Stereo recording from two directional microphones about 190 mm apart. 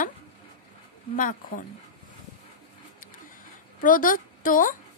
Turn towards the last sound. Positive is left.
turn(degrees=45)  # may be behind; listen again after turning